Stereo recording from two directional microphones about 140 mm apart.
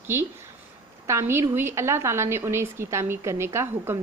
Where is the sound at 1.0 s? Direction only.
20° right (ahead or behind).